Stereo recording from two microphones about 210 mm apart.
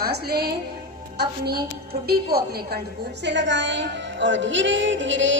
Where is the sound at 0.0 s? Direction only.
50° right (ahead or behind).